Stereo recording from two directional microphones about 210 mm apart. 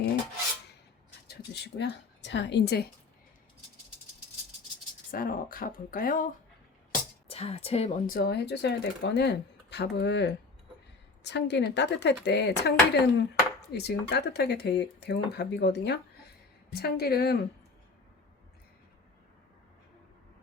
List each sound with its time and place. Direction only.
1.3 s speech: 50° left (ahead or behind)
5.1 s speech: 45° left (ahead or behind)
7.3 s a woman's voice: 30° left (ahead or behind)
8.0 s speech: 45° left (ahead or behind)